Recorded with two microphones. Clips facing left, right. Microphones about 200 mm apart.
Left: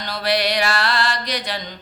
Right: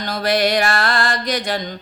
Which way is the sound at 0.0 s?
45° right (ahead or behind).